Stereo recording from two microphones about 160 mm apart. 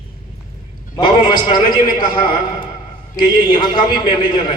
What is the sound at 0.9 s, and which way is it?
Speech, 25° left (ahead or behind).